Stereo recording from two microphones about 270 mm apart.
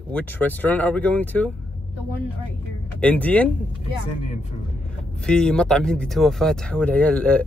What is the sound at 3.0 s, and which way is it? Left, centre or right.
Speech, centre.